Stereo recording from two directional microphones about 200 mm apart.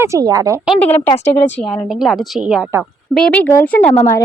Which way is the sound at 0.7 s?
5° left (ahead or behind).